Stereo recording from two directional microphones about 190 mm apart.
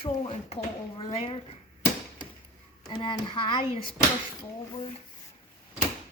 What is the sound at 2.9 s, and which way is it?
Speech, 25° left (ahead or behind).